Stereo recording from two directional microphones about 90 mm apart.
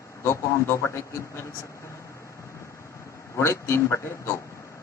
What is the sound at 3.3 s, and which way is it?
A man's voice, 30° left (ahead or behind).